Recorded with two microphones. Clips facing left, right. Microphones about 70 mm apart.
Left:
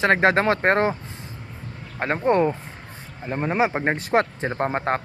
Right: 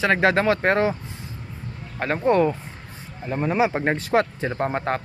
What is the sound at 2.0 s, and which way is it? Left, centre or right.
Speech, left.